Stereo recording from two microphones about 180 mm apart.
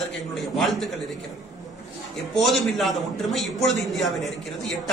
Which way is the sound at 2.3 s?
Centre (ahead or behind).